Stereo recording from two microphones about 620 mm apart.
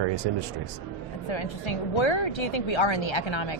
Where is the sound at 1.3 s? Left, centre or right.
Left.